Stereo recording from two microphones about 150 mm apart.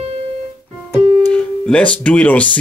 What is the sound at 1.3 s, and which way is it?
Speech, 10° left (ahead or behind).